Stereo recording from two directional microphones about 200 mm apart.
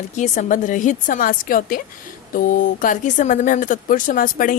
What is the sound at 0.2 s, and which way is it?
Speech, 40° left (ahead or behind).